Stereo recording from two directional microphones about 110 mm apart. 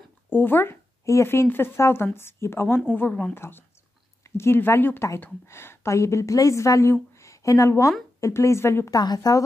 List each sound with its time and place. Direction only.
0.3 s a woman's voice: 20° left (ahead or behind)
8.9 s speech: 35° left (ahead or behind)